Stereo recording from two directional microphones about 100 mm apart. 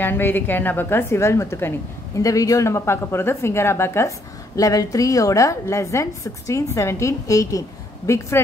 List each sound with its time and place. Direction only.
0.0 s a woman's voice: 20° left (ahead or behind)